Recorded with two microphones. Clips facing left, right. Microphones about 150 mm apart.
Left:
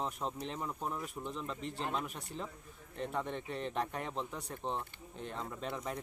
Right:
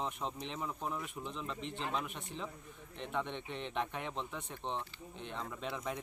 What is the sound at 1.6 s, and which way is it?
Speech, 40° left (ahead or behind).